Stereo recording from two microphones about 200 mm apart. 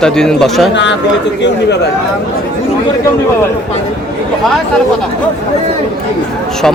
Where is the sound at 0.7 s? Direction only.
60° left (ahead or behind).